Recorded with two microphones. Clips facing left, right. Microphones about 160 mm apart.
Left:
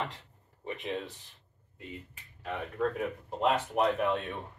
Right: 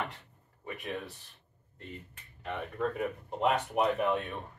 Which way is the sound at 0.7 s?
20° left (ahead or behind).